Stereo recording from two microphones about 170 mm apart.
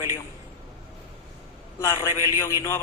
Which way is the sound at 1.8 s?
15° left (ahead or behind).